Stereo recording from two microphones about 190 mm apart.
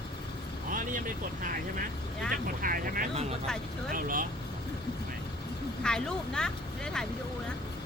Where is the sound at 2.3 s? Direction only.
45° right (ahead or behind).